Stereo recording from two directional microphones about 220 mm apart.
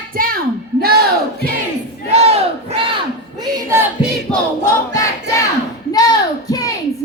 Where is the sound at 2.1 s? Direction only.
30° right (ahead or behind).